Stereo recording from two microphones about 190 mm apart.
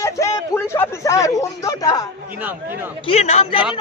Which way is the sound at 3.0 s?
35° left (ahead or behind).